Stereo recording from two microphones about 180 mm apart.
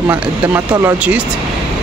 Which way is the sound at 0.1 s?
10° right (ahead or behind).